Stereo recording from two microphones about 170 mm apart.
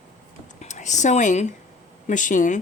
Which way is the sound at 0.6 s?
45° left (ahead or behind).